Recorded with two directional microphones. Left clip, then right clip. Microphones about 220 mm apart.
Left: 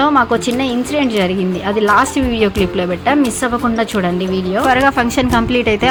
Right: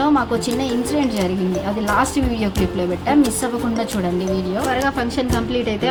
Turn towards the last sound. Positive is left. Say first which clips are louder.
# left 7 dB
turn(degrees=40)  # may be behind; listen again after turning